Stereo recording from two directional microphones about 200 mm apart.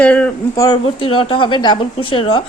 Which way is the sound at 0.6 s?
25° left (ahead or behind).